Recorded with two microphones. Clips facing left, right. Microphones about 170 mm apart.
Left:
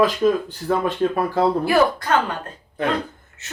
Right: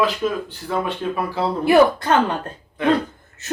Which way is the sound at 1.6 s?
25° right (ahead or behind).